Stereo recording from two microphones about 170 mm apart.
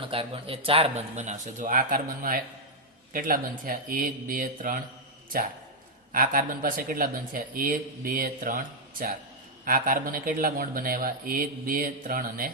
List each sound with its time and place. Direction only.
0.0 s speech: 30° right (ahead or behind); by 4.8 s 50° right (ahead or behind)
6.1 s speech: 55° right (ahead or behind)